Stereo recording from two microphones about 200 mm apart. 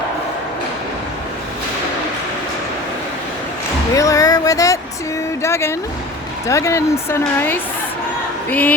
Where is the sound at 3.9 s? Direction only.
15° left (ahead or behind).